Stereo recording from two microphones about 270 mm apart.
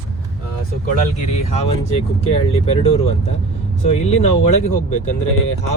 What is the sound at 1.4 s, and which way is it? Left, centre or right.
Speech, left.